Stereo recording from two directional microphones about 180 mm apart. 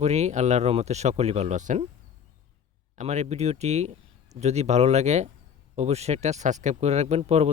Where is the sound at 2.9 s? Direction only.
40° right (ahead or behind).